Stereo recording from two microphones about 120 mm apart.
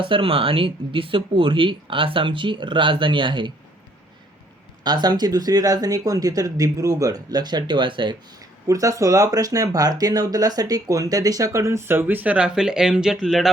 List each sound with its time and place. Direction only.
0.0 s speech: 45° right (ahead or behind)
4.8 s speech: 35° right (ahead or behind); by 13.5 s 5° right (ahead or behind)